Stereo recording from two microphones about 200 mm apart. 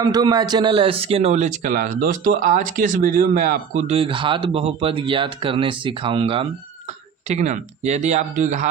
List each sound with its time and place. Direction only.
0.0 s speech: 20° right (ahead or behind); by 8.6 s 40° right (ahead or behind)